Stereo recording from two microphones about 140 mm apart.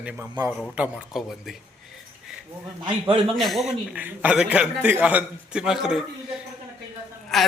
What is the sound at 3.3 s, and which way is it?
A man's voice, centre (ahead or behind).